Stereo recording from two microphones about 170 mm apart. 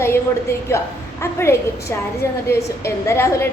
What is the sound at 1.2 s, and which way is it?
A woman's voice, 15° left (ahead or behind).